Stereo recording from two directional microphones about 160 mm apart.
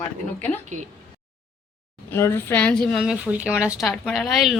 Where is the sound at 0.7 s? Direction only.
50° right (ahead or behind).